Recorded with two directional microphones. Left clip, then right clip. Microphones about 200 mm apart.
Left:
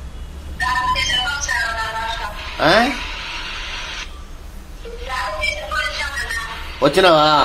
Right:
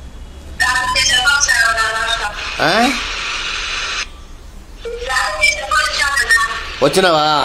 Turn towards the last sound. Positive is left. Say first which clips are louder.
# even
turn(degrees=-30)  # may be behind; listen again after turning